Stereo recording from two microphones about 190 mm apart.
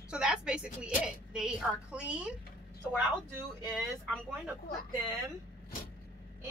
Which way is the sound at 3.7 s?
Centre (ahead or behind).